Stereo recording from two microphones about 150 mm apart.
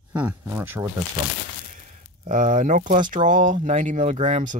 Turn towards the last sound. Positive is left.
turn(degrees=-55)  # may be behind; listen again after turning